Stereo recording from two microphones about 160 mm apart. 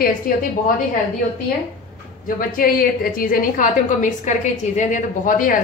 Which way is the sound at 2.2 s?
60° left (ahead or behind).